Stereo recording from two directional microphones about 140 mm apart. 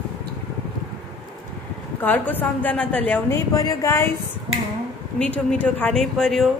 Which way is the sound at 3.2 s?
20° left (ahead or behind).